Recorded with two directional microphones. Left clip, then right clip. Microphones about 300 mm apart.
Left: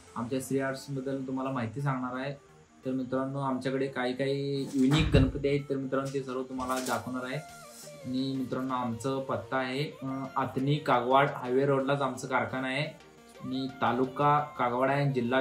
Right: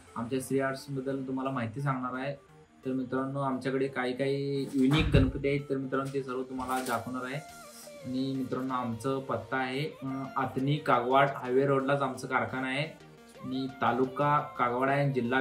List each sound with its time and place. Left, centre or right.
0.3 s speech: centre